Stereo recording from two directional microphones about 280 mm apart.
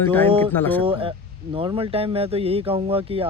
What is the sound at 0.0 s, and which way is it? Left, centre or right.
Speech, centre.